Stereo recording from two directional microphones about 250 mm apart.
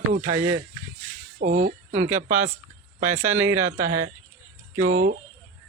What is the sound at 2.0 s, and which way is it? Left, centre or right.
Speech, right.